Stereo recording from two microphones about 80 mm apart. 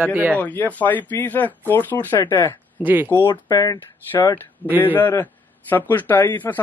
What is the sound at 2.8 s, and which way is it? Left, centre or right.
Speech, right.